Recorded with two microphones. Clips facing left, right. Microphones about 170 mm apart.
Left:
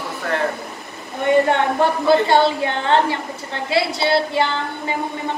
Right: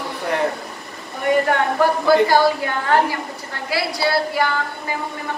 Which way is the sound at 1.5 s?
25° left (ahead or behind).